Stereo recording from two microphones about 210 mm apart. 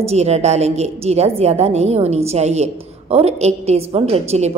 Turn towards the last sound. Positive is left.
turn(degrees=-30)  # may be behind; listen again after turning